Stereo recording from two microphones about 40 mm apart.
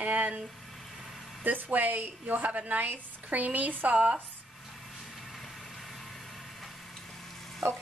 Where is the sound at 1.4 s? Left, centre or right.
Right.